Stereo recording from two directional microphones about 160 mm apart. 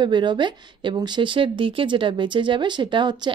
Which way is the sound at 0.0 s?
30° right (ahead or behind).